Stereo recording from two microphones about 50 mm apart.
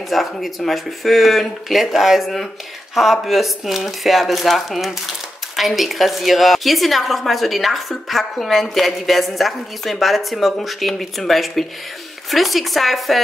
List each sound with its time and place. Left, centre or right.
0.1 s a woman's voice: centre